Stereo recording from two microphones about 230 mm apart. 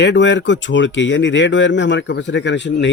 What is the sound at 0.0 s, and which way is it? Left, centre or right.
Speech, left.